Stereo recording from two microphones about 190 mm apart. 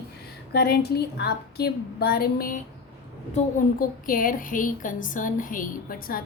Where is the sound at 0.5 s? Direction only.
55° left (ahead or behind).